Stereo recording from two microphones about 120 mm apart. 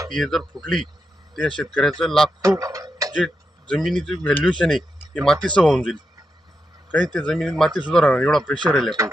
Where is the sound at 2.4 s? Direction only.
25° right (ahead or behind).